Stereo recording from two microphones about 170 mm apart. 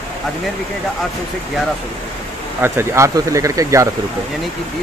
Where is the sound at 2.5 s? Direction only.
15° right (ahead or behind).